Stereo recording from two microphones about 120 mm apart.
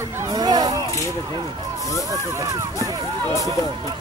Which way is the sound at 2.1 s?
30° right (ahead or behind).